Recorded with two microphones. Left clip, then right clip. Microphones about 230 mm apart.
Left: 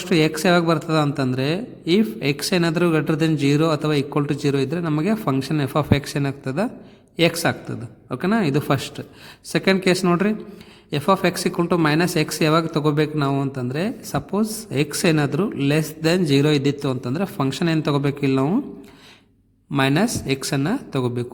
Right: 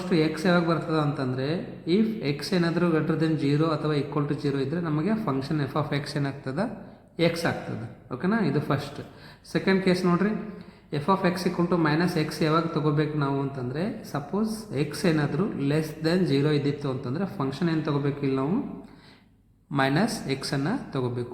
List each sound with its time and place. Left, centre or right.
0.1 s a man's voice: left
19.7 s speech: left